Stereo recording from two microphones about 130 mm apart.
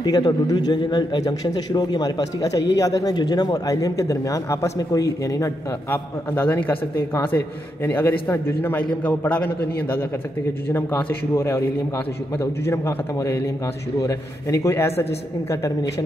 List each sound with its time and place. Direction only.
0.0 s a man's voice: 30° left (ahead or behind)
5.9 s a man's voice: 15° left (ahead or behind)